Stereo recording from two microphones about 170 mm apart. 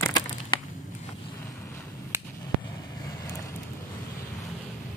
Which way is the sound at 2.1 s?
15° right (ahead or behind).